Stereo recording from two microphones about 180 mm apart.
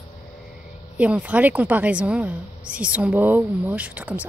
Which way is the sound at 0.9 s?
5° right (ahead or behind).